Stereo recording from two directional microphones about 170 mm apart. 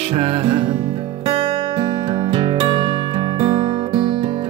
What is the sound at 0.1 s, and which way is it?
Music, 35° right (ahead or behind).